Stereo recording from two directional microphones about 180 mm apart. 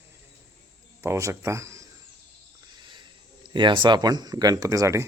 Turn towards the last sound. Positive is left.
turn(degrees=-15)  # may be behind; listen again after turning